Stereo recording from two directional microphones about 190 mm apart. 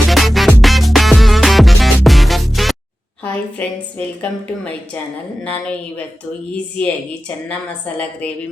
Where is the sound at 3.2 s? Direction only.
5° left (ahead or behind).